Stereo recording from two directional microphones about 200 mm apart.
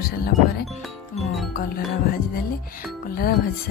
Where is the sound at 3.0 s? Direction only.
50° left (ahead or behind).